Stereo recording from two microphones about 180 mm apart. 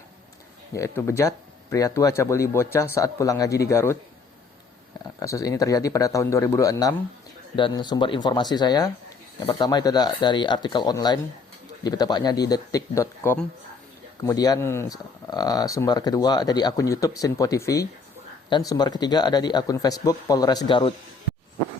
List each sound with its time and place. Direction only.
0.7 s speech: 15° left (ahead or behind)
5.2 s speech: 20° left (ahead or behind)